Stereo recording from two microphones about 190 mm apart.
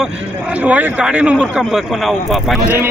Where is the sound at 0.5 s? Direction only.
5° right (ahead or behind).